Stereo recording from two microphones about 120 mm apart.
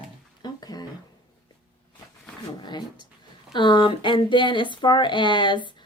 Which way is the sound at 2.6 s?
40° left (ahead or behind).